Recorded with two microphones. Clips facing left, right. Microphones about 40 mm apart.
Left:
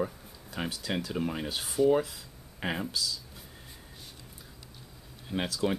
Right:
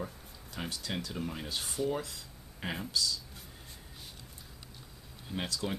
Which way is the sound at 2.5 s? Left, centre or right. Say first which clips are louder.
Left 5 dB; left.